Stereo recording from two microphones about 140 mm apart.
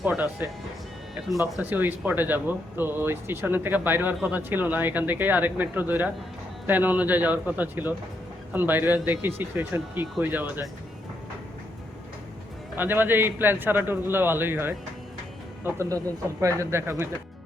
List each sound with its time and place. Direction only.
0.0 s speech: 10° right (ahead or behind)
1.7 s speech: 10° right (ahead or behind)
12.7 s speech: 15° right (ahead or behind)